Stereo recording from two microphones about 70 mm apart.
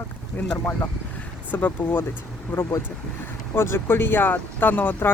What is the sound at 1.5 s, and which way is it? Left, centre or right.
Speech, left.